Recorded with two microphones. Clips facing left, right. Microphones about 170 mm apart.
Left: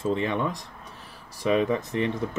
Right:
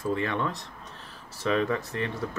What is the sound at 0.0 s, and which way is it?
Speech, 20° left (ahead or behind).